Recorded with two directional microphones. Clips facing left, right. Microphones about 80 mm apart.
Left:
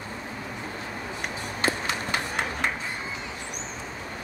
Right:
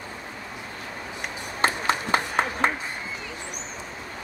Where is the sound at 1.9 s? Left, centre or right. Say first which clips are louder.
Right 5 dB; right.